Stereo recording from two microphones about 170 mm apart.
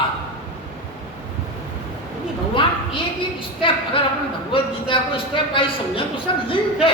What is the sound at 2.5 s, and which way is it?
Speech, 30° left (ahead or behind).